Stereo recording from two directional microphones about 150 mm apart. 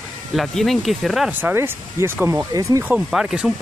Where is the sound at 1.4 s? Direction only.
15° right (ahead or behind).